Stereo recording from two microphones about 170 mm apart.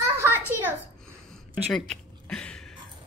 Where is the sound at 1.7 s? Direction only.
5° left (ahead or behind).